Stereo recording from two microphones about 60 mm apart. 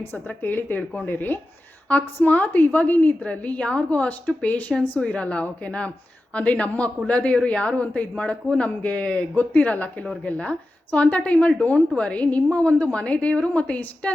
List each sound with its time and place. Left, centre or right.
0.1 s speech: left